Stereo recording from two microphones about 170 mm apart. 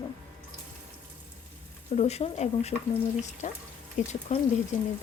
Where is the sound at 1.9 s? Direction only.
40° left (ahead or behind).